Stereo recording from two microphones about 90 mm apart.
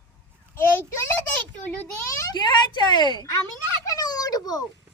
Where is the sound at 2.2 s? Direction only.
50° left (ahead or behind).